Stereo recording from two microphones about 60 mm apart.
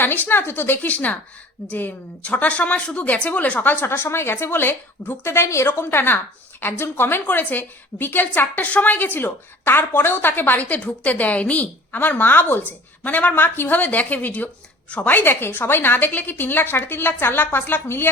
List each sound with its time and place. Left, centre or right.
0.0 s a woman's voice: left
11.9 s a woman's voice: left